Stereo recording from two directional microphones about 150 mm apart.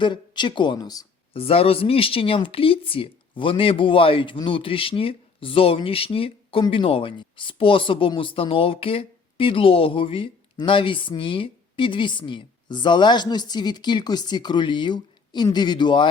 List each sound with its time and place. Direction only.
0.0 s speech: 30° left (ahead or behind)
1.3 s speech: 40° left (ahead or behind)